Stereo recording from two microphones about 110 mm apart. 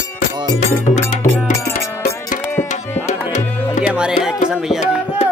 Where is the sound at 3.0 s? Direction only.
90° left.